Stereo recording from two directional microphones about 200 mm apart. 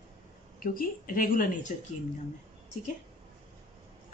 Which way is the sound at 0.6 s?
45° left (ahead or behind).